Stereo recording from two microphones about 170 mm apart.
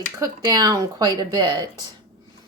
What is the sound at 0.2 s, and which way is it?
Cutlery, 20° right (ahead or behind).